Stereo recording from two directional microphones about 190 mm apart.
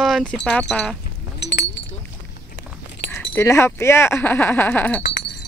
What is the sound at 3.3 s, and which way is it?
Speech, 15° left (ahead or behind).